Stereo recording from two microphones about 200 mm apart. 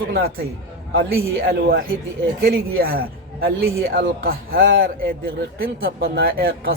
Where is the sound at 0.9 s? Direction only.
50° right (ahead or behind).